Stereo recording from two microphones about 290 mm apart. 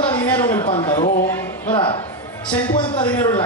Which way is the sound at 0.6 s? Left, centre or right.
Centre.